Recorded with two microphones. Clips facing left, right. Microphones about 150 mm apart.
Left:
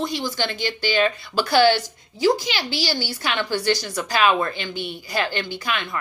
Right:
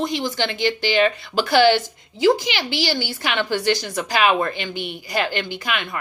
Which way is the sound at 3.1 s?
50° right (ahead or behind).